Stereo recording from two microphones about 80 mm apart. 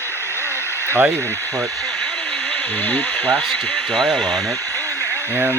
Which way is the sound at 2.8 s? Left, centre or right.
Left.